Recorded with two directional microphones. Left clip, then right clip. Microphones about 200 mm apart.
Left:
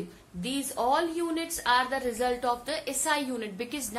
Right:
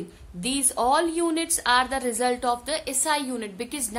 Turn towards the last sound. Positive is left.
turn(degrees=-35)  # may be behind; listen again after turning